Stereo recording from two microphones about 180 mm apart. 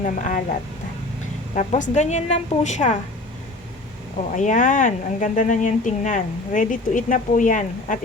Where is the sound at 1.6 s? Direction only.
40° left (ahead or behind).